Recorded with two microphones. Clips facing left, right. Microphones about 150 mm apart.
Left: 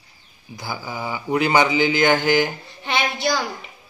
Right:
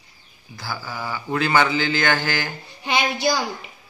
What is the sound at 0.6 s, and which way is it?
A man's voice, 20° left (ahead or behind).